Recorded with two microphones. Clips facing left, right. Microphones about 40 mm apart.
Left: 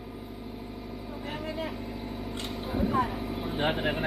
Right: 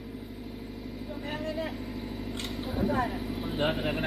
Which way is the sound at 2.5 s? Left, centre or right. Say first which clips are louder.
Left 1 dB; centre.